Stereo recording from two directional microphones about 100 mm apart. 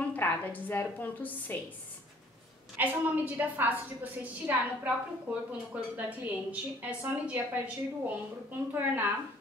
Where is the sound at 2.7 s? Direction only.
15° right (ahead or behind).